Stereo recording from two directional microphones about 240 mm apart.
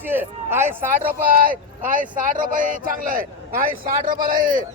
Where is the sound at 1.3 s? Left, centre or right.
Right.